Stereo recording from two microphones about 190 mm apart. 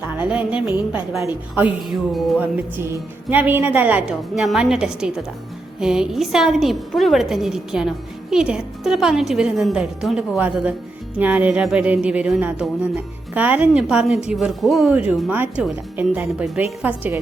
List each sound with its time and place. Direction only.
0.2 s a woman's voice: 5° right (ahead or behind)